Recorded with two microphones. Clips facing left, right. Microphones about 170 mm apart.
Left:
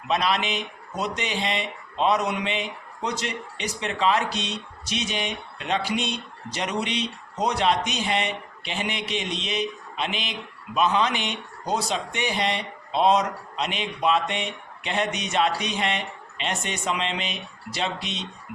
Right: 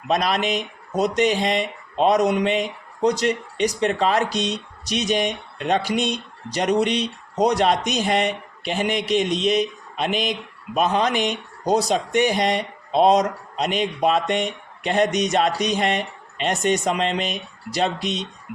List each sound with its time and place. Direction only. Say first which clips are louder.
0.1 s speech: right 3 dB; 45° right (ahead or behind)